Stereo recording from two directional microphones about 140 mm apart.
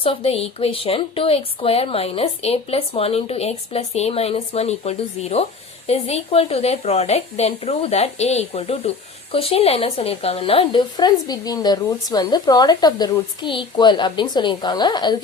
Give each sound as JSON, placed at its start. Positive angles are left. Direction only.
{"t": 0.0, "sound": "a woman's voice", "side_deg": 45}